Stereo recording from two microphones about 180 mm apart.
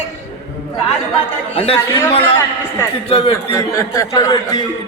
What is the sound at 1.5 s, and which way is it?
Speech, 30° left (ahead or behind).